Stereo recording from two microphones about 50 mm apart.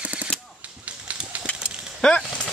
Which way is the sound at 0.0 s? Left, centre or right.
Right.